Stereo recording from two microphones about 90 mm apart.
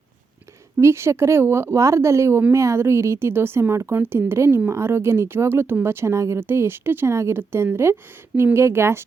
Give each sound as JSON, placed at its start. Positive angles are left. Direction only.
{"t": 0.8, "sound": "speech", "side_deg": -30}